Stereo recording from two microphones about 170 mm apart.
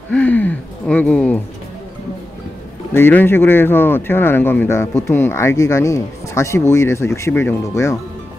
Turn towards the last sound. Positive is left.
turn(degrees=20)  # may be behind; listen again after turning